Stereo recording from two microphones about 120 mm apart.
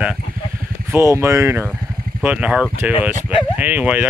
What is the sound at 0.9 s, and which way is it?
Speech, 20° right (ahead or behind).